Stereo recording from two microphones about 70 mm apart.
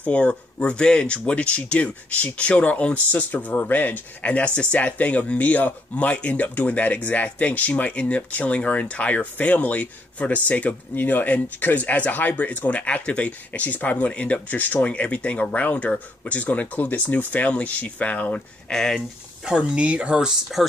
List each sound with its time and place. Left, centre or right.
0.0 s speech: centre
18.7 s speech: centre
19.4 s speech: centre